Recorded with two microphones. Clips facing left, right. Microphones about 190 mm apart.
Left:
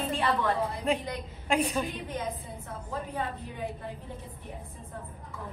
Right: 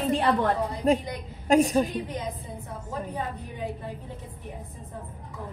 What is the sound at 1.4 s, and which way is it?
Speech, 40° right (ahead or behind).